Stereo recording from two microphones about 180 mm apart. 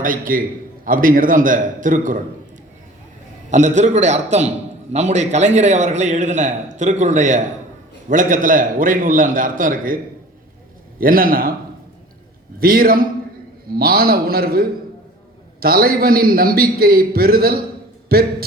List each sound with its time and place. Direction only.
0.0 s a man's voice: 50° right (ahead or behind)
3.5 s a man's voice: 40° right (ahead or behind)
11.0 s a man's voice: 55° right (ahead or behind)
12.5 s a man's voice: 55° right (ahead or behind)